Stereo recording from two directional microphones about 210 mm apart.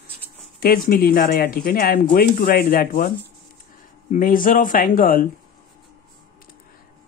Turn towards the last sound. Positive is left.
turn(degrees=40)  # may be behind; listen again after turning